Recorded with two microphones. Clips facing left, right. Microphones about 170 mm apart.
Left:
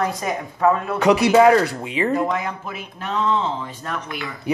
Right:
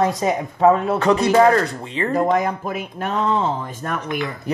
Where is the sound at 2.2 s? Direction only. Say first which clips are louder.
Right 4 dB; 45° right (ahead or behind).